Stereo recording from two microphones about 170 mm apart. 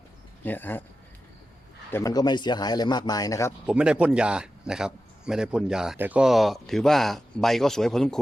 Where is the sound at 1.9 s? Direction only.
20° left (ahead or behind).